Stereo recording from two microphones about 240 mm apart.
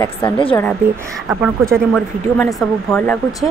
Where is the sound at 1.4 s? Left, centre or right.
Centre.